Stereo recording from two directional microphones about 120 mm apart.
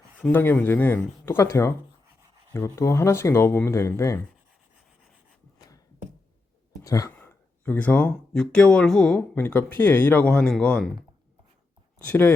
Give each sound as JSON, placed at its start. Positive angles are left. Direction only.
{"t": 0.2, "sound": "speech", "side_deg": 15}
{"t": 6.8, "sound": "speech", "side_deg": 30}
{"t": 7.1, "sound": "speech", "side_deg": 15}